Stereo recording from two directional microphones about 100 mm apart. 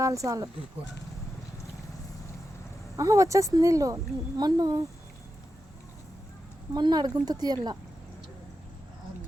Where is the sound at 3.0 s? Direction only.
30° right (ahead or behind).